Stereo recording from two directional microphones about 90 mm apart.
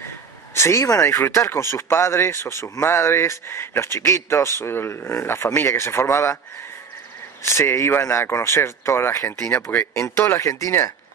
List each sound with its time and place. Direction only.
0.6 s speech: 35° left (ahead or behind)
7.4 s speech: 30° left (ahead or behind)